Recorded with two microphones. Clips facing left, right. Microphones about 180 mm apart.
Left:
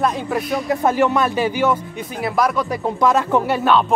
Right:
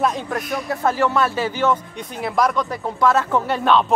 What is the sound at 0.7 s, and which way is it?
A man's voice, 15° left (ahead or behind).